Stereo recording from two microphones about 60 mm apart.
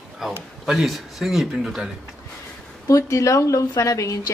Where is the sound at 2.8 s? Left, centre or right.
Left.